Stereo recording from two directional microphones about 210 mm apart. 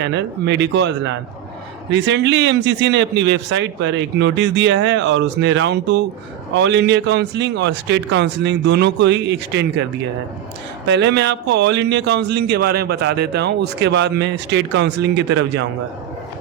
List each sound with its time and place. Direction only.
0.0 s speech: 55° right (ahead or behind)
10.8 s speech: 55° right (ahead or behind)